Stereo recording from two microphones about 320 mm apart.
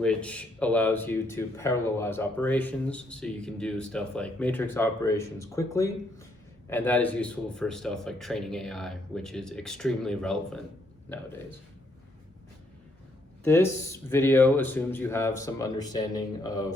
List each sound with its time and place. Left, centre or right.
0.0 s speech: centre
13.4 s speech: centre